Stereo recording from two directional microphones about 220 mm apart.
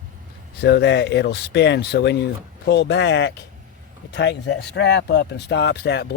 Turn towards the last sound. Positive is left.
turn(degrees=50)  # may be behind; listen again after turning